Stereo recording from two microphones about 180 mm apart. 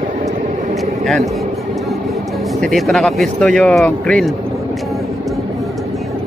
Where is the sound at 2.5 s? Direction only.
Centre (ahead or behind).